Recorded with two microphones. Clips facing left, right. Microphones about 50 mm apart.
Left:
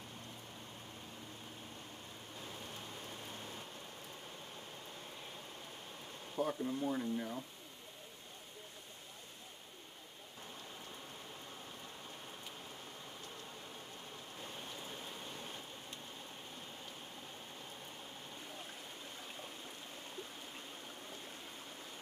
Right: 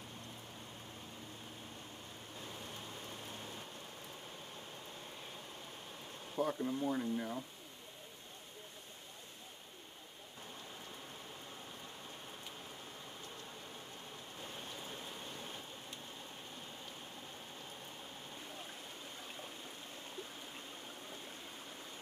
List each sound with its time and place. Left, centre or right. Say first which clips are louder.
2.4 s rain: even; centre
6.3 s speech: right 1 dB; centre
14.4 s stream: even; centre